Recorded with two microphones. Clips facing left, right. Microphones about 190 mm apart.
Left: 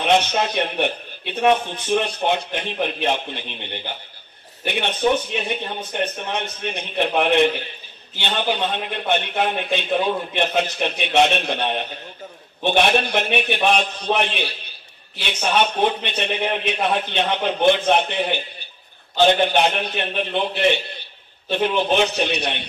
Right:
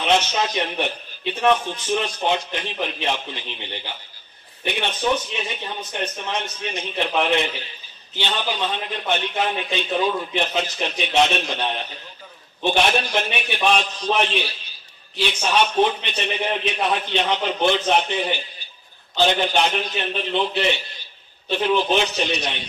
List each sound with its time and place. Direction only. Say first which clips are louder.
0.0 s a man's voice: left 2 dB; 55° left (ahead or behind)